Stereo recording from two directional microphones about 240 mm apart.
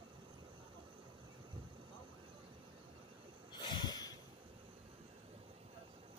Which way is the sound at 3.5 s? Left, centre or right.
Centre.